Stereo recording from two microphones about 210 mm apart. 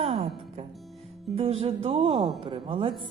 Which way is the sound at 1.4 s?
30° right (ahead or behind).